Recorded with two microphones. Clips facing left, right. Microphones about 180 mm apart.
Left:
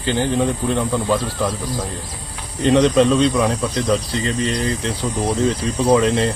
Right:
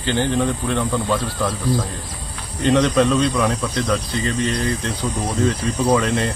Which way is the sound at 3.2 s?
25° left (ahead or behind).